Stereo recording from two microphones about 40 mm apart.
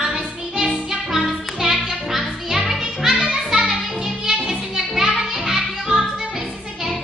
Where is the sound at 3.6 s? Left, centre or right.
Centre.